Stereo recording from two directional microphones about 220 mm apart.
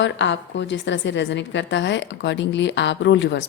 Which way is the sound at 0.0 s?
55° left (ahead or behind).